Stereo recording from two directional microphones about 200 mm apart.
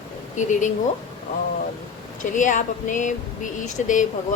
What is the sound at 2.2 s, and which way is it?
Speech, 40° left (ahead or behind).